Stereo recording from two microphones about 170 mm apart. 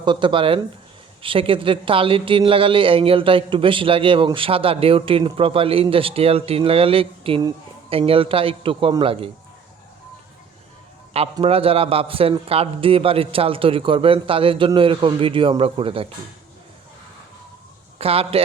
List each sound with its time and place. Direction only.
0.0 s speech: 30° right (ahead or behind)
11.1 s speech: 35° right (ahead or behind)
17.9 s speech: 35° right (ahead or behind)